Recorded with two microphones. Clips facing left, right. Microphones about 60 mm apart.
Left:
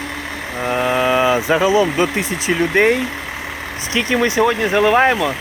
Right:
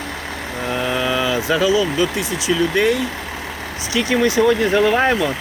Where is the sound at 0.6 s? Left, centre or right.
Left.